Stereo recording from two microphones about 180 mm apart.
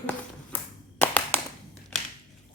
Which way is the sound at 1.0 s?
10° left (ahead or behind).